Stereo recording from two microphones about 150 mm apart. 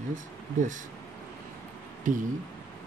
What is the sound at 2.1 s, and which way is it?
Speech, 55° right (ahead or behind).